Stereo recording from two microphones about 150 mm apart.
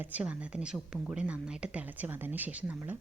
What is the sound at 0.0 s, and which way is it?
Speech, 10° right (ahead or behind).